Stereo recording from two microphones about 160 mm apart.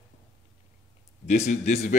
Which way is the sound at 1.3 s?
50° left (ahead or behind).